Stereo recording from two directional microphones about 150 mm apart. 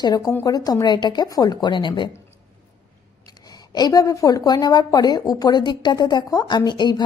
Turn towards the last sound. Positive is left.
turn(degrees=30)  # may be behind; listen again after turning